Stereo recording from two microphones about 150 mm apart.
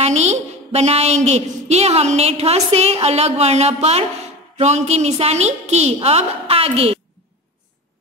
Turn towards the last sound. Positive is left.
turn(degrees=-40)  # may be behind; listen again after turning